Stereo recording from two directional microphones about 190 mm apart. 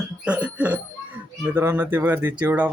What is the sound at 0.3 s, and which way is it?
Speech, 5° right (ahead or behind).